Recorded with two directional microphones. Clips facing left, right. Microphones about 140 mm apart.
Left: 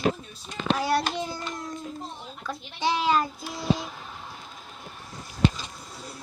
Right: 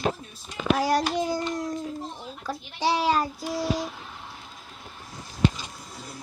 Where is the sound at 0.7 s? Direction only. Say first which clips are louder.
Right 1 dB; 40° right (ahead or behind).